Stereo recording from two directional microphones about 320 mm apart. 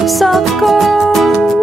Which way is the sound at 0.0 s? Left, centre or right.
Centre.